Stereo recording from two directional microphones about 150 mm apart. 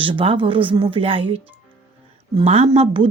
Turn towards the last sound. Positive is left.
turn(degrees=-40)  # may be behind; listen again after turning